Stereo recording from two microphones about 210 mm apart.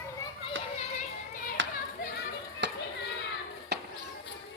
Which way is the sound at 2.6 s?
60° right (ahead or behind).